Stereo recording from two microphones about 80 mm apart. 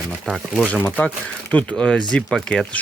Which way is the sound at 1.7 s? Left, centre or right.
Centre.